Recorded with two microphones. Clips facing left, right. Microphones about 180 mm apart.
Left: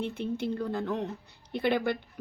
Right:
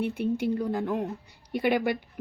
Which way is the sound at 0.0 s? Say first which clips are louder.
Right 5 dB; 10° right (ahead or behind).